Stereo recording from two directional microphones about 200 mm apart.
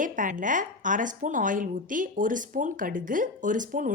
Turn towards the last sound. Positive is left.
turn(degrees=-40)  # may be behind; listen again after turning